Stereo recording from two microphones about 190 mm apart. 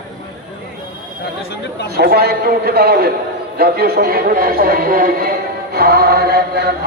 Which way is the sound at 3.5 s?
55° right (ahead or behind).